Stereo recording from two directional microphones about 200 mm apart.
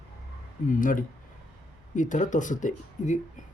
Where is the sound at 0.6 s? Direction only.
40° left (ahead or behind).